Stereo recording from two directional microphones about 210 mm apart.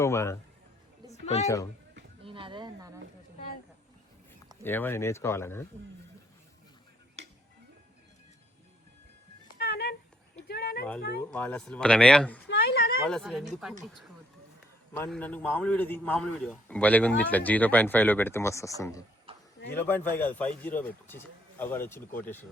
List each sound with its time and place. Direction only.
0.0 s a man's voice: 15° left (ahead or behind)
1.1 s a sound: 30° left (ahead or behind)
2.2 s a sound: 25° right (ahead or behind)
4.6 s a man's voice: 10° left (ahead or behind)
9.5 s music: 50° left (ahead or behind)
10.5 s a sound: 50° left (ahead or behind)
11.2 s speech: 5° left (ahead or behind)
12.5 s speech: 50° left (ahead or behind)
13.1 s speech: centre (ahead or behind)
14.9 s a man's voice: 10° left (ahead or behind)
19.3 s a sound: 25° right (ahead or behind)
19.7 s a man's voice: 10° left (ahead or behind)